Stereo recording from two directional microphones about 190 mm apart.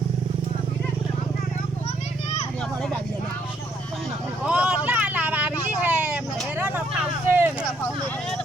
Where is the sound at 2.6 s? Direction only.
5° left (ahead or behind).